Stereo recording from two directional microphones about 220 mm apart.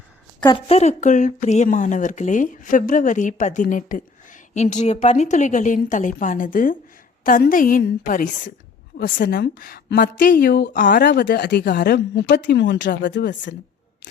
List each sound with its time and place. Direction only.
0.4 s a woman's voice: 25° left (ahead or behind); by 13.5 s 55° left (ahead or behind)